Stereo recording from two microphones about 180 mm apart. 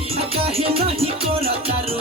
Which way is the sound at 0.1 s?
35° right (ahead or behind).